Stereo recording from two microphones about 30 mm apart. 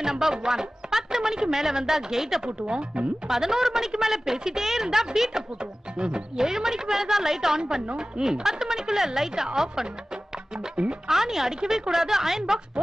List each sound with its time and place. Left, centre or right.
0.0 s speech: centre
5.9 s speech: right
11.1 s speech: centre